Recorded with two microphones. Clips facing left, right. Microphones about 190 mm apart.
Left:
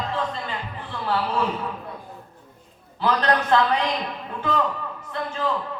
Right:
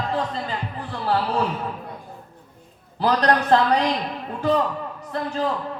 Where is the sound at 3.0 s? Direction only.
40° right (ahead or behind).